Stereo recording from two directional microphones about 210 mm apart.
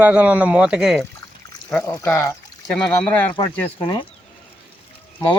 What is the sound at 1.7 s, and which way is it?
Speech, 10° left (ahead or behind).